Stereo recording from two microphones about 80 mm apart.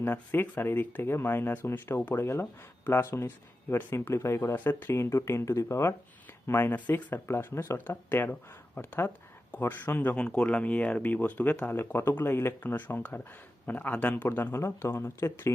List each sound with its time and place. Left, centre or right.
0.0 s speech: left
4.5 s speech: left
6.5 s speech: left
7.3 s speech: left
8.1 s speech: left
14.3 s speech: left